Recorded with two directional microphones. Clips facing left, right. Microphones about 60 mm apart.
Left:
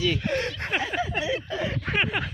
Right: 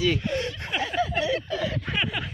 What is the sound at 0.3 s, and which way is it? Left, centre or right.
Snicker, left.